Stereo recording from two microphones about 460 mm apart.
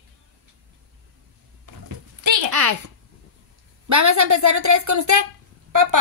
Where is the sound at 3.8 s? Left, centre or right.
Right.